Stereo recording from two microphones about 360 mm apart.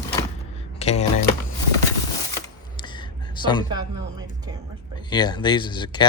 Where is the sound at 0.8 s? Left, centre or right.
Centre.